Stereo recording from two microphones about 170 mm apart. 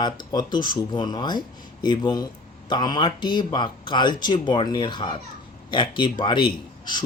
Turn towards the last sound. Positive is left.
turn(degrees=30)  # may be behind; listen again after turning